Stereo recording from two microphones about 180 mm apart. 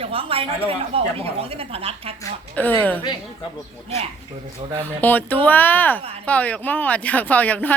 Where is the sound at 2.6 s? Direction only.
10° left (ahead or behind).